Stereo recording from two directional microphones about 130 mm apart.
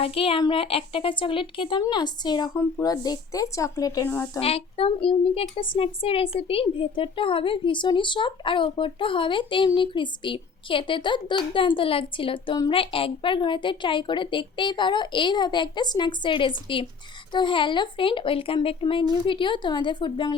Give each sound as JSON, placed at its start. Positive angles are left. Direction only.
{"t": 0.0, "sound": "a woman's voice", "side_deg": 45}
{"t": 4.4, "sound": "a child's voice", "side_deg": 50}